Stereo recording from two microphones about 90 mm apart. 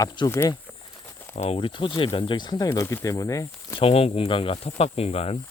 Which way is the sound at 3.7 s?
90° left.